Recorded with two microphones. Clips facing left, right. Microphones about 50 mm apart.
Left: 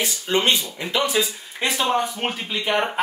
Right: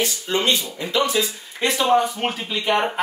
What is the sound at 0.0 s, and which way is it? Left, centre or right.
Speech, left.